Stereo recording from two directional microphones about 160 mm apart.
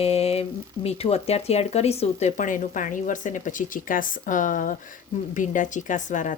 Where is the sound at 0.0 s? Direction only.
40° left (ahead or behind).